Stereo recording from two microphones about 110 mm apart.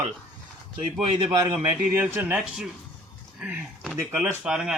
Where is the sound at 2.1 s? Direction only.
15° right (ahead or behind).